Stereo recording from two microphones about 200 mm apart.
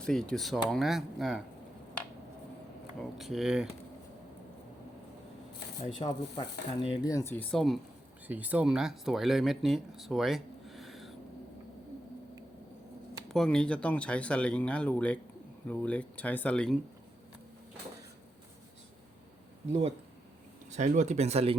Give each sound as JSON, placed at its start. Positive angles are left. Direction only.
{"t": 0.0, "sound": "speech", "side_deg": 5}
{"t": 3.2, "sound": "speech", "side_deg": 0}
{"t": 5.8, "sound": "speech", "side_deg": 25}
{"t": 13.3, "sound": "speech", "side_deg": 5}
{"t": 20.7, "sound": "speech", "side_deg": -35}